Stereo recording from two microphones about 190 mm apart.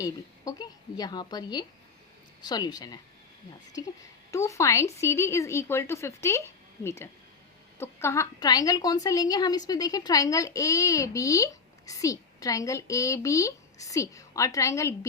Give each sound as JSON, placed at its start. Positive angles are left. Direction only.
{"t": 0.0, "sound": "a woman's voice", "side_deg": 20}